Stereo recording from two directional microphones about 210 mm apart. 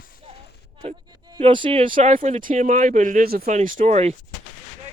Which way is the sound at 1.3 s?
25° right (ahead or behind).